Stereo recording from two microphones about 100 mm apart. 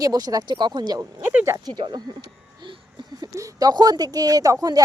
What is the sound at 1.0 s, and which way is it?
Speech, 25° right (ahead or behind).